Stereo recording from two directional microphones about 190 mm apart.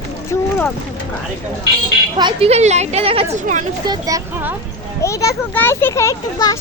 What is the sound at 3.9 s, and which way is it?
Speech, 20° right (ahead or behind).